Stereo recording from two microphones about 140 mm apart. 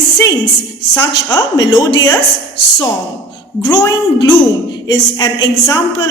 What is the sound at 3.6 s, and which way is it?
A woman's voice, 30° left (ahead or behind).